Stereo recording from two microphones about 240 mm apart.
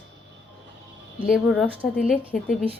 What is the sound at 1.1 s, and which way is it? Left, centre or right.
A woman's voice, centre.